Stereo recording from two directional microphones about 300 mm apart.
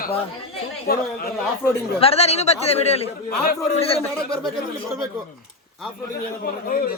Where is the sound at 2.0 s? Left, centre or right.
Centre.